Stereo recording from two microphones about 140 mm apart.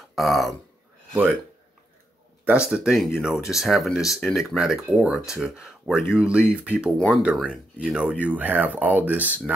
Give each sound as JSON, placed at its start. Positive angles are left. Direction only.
{"t": 0.1, "sound": "speech", "side_deg": 0}
{"t": 2.4, "sound": "speech", "side_deg": -5}